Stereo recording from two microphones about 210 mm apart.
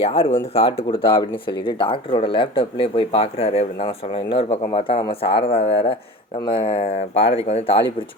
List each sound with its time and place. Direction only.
0.1 s speech: 25° left (ahead or behind)